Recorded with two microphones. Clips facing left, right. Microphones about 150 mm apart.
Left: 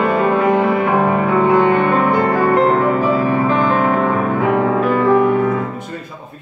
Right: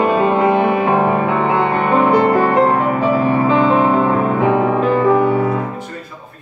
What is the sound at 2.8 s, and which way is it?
Music, 20° right (ahead or behind).